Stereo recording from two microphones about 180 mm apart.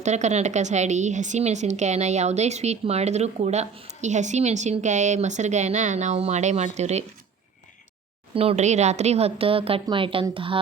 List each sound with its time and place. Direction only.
0.0 s a woman's voice: 40° right (ahead or behind)
8.4 s a woman's voice: 35° right (ahead or behind)